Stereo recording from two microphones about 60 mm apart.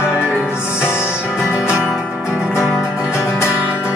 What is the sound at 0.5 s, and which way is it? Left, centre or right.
Music, left.